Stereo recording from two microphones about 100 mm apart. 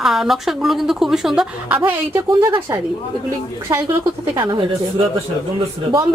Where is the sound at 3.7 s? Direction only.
35° right (ahead or behind).